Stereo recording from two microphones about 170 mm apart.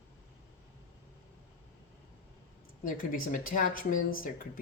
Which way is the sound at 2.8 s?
55° left (ahead or behind).